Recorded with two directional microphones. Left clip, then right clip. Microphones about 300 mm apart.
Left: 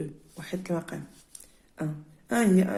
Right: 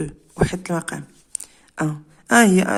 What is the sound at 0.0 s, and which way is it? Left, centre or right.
Speech, right.